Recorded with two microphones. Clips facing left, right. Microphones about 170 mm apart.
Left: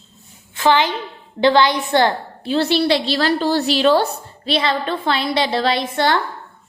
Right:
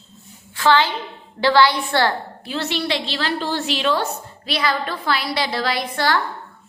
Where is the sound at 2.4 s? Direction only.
35° left (ahead or behind).